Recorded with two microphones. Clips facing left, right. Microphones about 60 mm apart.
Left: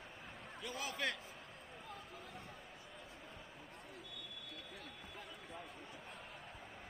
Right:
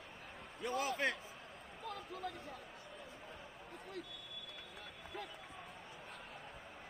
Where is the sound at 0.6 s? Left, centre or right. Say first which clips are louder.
Right 6 dB; right.